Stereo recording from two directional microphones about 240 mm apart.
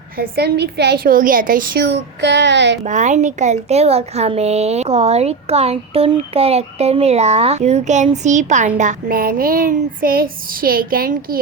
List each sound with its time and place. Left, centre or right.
0.2 s a woman's voice: right
2.8 s a woman's voice: right